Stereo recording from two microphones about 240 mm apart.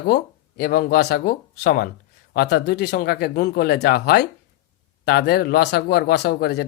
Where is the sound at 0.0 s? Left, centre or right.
Left.